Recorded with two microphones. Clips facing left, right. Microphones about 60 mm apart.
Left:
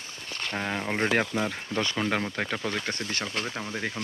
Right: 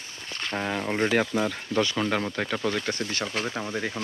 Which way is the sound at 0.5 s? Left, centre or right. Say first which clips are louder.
Right 2 dB; centre.